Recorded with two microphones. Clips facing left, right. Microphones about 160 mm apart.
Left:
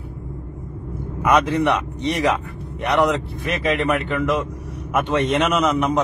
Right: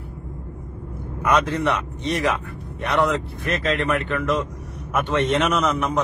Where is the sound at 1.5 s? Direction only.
10° left (ahead or behind).